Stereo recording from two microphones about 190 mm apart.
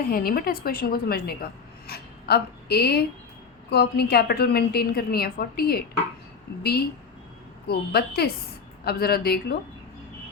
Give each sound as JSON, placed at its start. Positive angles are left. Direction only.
{"t": 0.1, "sound": "a woman's voice", "side_deg": 50}